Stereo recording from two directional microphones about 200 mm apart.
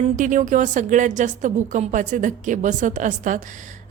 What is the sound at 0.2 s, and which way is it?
A woman's voice, 40° right (ahead or behind).